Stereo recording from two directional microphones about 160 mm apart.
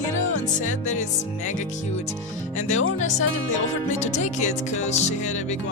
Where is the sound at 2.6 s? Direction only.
50° left (ahead or behind).